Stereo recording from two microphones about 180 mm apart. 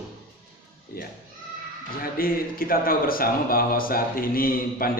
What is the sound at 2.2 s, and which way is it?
Speech, 55° left (ahead or behind).